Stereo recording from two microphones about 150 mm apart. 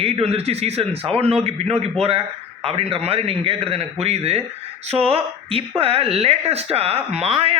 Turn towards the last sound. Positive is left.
turn(degrees=-40)  # may be behind; listen again after turning